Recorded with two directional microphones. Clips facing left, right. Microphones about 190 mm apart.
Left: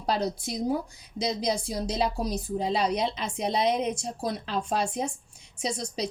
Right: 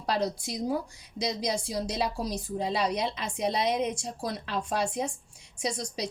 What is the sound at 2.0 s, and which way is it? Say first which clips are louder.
Speech: left 3 dB; 25° left (ahead or behind).